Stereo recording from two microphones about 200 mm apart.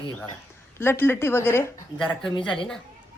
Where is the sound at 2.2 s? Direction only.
25° left (ahead or behind).